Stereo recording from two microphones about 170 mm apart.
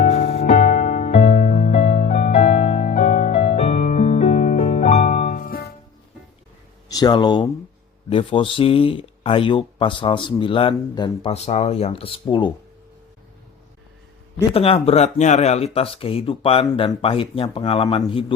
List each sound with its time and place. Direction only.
0.0 s music: 40° left (ahead or behind); by 5.7 s 60° left (ahead or behind)
6.8 s speech: 25° left (ahead or behind)
14.5 s speech: 35° left (ahead or behind)